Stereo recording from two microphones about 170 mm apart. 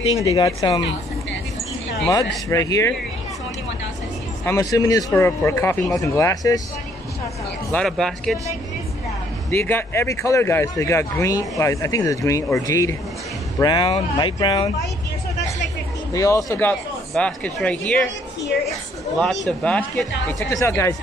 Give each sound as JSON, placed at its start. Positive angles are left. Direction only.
{"t": 0.2, "sound": "speech", "side_deg": 20}
{"t": 2.0, "sound": "speech", "side_deg": 20}
{"t": 4.5, "sound": "speech", "side_deg": 20}
{"t": 7.7, "sound": "speech", "side_deg": 5}
{"t": 9.5, "sound": "speech", "side_deg": 10}
{"t": 16.1, "sound": "speech", "side_deg": 20}
{"t": 19.4, "sound": "speech", "side_deg": 5}
{"t": 20.2, "sound": "speech", "side_deg": 15}